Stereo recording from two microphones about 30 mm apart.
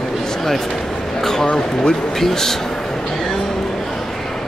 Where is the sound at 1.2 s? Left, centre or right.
Centre.